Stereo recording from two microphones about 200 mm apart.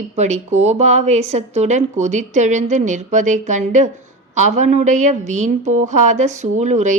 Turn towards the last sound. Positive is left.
turn(degrees=-35)  # may be behind; listen again after turning